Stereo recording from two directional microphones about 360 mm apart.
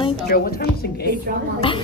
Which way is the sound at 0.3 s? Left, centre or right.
Left.